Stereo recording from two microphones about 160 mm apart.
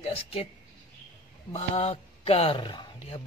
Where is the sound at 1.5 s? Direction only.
40° left (ahead or behind).